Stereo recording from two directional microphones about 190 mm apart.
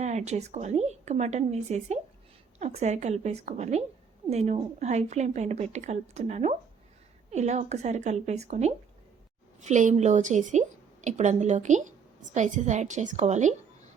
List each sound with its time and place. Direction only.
0.0 s a woman's voice: 35° right (ahead or behind)